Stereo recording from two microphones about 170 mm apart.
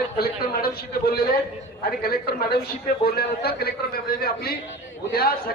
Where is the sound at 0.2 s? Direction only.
65° left (ahead or behind).